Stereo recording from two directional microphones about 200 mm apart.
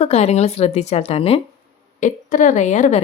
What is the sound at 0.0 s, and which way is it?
Speech, 35° left (ahead or behind).